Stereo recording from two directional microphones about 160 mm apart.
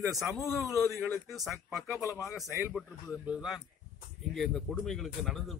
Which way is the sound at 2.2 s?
Centre (ahead or behind).